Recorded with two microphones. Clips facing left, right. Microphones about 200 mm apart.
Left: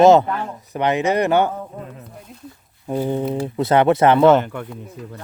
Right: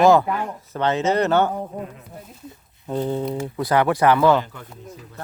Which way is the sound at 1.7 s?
15° right (ahead or behind).